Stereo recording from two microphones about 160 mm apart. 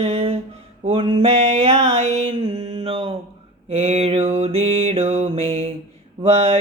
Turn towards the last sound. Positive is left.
turn(degrees=-40)  # may be behind; listen again after turning